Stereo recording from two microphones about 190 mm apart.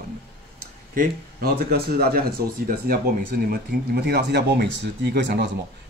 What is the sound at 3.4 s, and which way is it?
Speech, 55° right (ahead or behind).